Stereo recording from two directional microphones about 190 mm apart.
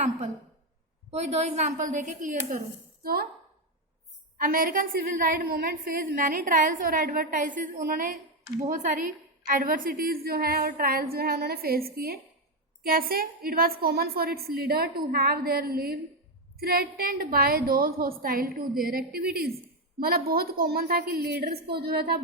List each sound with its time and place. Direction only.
1.1 s a woman's voice: 35° right (ahead or behind)
3.0 s a woman's voice: 50° right (ahead or behind)
4.4 s a woman's voice: 45° right (ahead or behind)